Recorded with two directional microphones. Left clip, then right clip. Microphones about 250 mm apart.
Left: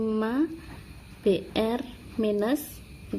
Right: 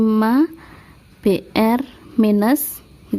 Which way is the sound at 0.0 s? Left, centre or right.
Right.